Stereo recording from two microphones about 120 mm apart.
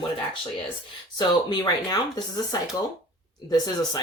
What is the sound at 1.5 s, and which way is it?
Speech, 35° left (ahead or behind).